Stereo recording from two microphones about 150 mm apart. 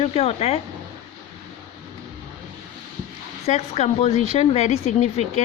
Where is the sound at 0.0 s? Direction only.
45° left (ahead or behind).